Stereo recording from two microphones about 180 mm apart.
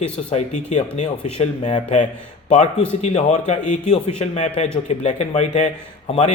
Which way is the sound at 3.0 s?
35° left (ahead or behind).